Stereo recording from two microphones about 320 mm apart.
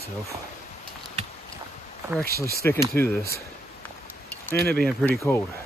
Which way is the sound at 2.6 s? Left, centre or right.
Centre.